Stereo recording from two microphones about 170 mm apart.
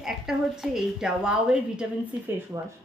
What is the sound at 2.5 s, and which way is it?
Speech, 20° right (ahead or behind).